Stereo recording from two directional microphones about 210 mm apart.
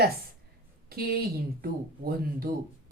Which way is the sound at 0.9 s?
45° right (ahead or behind).